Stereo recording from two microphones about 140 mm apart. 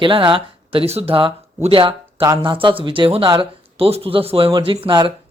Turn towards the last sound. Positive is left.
turn(degrees=-35)  # may be behind; listen again after turning